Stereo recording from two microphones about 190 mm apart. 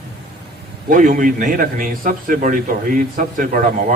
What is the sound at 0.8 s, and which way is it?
A man's voice, 50° right (ahead or behind).